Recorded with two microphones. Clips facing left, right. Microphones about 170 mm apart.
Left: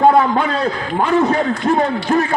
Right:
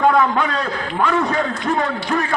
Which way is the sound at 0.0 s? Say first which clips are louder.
Left 3 dB; 30° left (ahead or behind).